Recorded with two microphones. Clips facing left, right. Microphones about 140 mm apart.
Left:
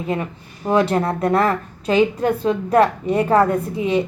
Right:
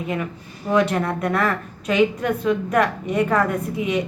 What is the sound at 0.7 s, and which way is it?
A woman's voice, 30° left (ahead or behind).